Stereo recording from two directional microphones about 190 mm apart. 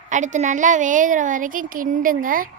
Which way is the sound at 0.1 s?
40° right (ahead or behind).